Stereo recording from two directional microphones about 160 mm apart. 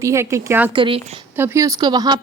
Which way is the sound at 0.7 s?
30° right (ahead or behind).